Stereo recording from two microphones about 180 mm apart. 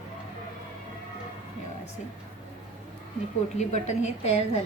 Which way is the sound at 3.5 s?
40° left (ahead or behind).